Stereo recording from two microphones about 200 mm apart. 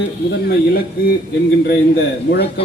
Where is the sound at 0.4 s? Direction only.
50° left (ahead or behind).